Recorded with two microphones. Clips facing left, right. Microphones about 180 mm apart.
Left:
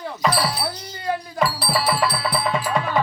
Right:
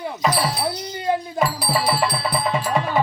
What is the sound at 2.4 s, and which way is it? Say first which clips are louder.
Music: right 1 dB; centre (ahead or behind).